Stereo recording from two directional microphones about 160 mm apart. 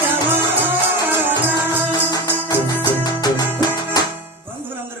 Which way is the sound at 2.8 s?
25° left (ahead or behind).